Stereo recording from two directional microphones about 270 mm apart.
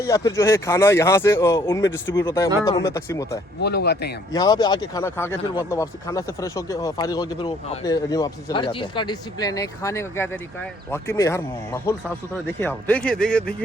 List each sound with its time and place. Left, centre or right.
0.0 s speech: centre
3.6 s speech: left
4.3 s speech: centre